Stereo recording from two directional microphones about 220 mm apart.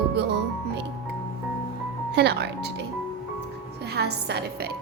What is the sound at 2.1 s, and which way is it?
Speech, 50° right (ahead or behind).